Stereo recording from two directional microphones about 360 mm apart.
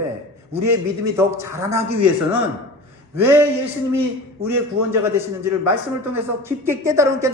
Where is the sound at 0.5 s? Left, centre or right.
Centre.